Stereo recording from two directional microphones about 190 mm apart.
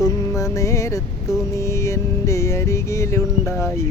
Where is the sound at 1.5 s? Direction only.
15° left (ahead or behind).